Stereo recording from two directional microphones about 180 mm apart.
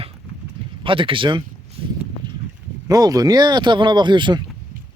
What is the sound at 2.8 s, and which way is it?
Speech, 20° right (ahead or behind).